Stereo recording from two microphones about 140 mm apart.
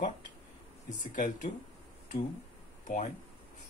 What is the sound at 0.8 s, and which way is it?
Speech, 70° left (ahead or behind).